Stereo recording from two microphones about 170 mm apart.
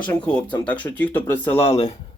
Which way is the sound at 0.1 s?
10° left (ahead or behind).